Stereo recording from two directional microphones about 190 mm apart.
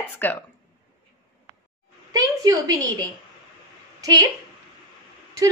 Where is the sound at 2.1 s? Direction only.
20° right (ahead or behind).